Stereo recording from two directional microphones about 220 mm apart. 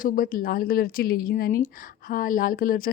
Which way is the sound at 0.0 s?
40° left (ahead or behind).